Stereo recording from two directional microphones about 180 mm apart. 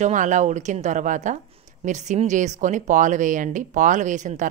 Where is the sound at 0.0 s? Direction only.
45° right (ahead or behind).